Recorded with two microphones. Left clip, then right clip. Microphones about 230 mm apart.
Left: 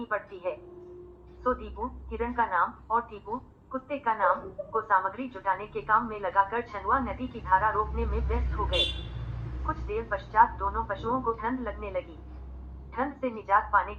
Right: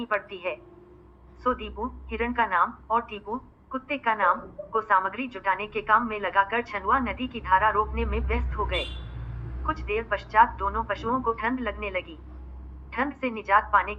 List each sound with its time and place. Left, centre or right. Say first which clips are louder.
1.5 s a woman's voice: right 2 dB; right
9.6 s a woman's voice: right 4 dB; right